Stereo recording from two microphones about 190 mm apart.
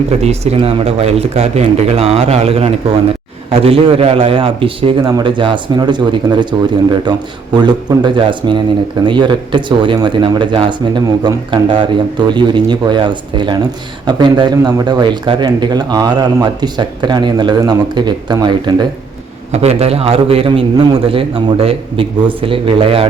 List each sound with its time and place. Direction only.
0.2 s speech: 35° right (ahead or behind)
19.5 s speech: 35° right (ahead or behind)